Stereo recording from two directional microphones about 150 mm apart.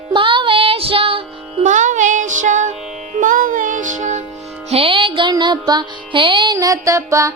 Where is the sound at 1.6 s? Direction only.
55° right (ahead or behind).